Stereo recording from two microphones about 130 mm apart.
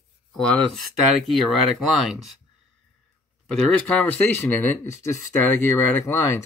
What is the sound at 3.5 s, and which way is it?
Speech, 10° left (ahead or behind).